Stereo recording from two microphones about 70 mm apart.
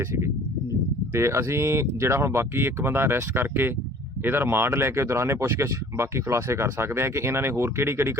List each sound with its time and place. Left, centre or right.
1.1 s speech: right